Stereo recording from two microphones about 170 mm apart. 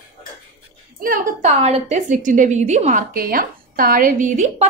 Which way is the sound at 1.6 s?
40° right (ahead or behind).